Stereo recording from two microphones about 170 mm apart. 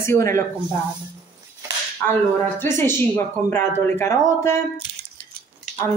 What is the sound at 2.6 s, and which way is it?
A woman's voice, 15° left (ahead or behind).